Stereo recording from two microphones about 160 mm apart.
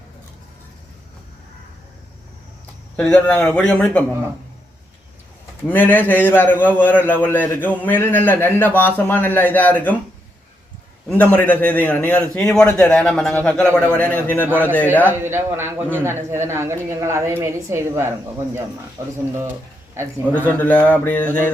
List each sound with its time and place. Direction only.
2.9 s a man's voice: 10° left (ahead or behind)
5.6 s a man's voice: 10° left (ahead or behind)
11.1 s a man's voice: 10° left (ahead or behind)
15.0 s a man's voice: 15° right (ahead or behind)
20.5 s a man's voice: 10° left (ahead or behind)